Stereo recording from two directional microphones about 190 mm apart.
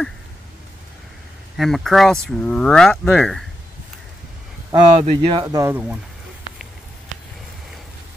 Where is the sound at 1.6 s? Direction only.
Centre (ahead or behind).